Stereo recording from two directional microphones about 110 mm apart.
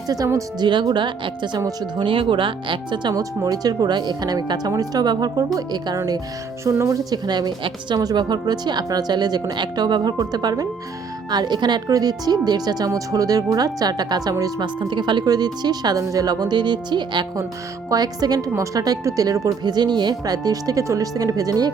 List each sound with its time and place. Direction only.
0.6 s speech: 45° right (ahead or behind)
14.8 s speech: 45° right (ahead or behind)